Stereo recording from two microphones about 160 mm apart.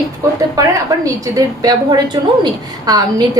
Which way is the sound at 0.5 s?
20° right (ahead or behind).